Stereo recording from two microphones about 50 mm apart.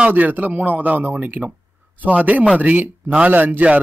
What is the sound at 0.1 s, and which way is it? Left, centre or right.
Speech, right.